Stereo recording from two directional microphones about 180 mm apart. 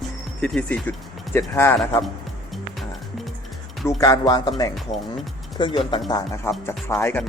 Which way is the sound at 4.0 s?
20° left (ahead or behind).